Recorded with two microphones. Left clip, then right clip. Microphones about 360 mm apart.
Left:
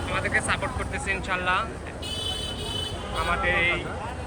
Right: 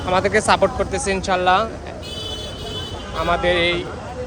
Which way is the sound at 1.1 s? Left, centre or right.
Centre.